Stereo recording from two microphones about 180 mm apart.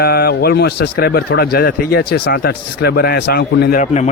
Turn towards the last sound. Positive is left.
turn(degrees=40)  # may be behind; listen again after turning